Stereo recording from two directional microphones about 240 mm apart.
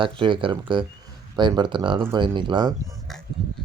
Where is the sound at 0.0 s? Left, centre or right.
Right.